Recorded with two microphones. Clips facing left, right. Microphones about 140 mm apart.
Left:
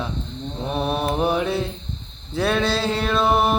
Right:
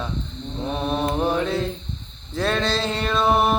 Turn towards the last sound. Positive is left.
turn(degrees=0)  # may be behind; listen again after turning